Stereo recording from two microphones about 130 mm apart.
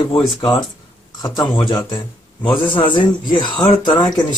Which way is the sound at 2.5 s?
40° left (ahead or behind).